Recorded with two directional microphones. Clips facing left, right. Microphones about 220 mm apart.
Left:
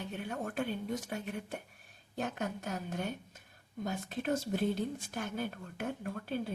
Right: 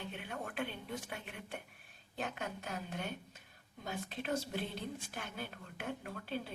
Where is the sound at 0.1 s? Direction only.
45° left (ahead or behind).